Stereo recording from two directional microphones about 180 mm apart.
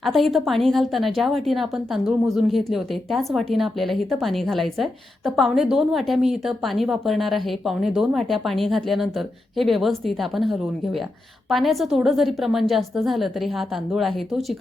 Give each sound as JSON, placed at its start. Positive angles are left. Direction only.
{"t": 0.0, "sound": "speech", "side_deg": 0}